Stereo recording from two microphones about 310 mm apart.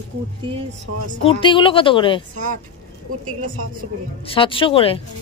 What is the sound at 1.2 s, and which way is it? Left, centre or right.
A woman's voice, centre.